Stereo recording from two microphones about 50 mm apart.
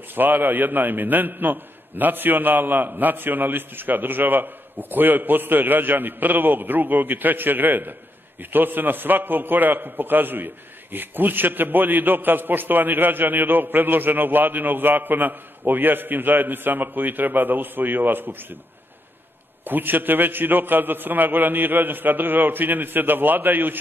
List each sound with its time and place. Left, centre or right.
0.1 s a man's voice: right
19.6 s a man's voice: right